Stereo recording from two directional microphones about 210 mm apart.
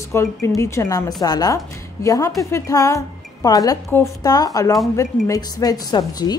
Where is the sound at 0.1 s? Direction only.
15° left (ahead or behind).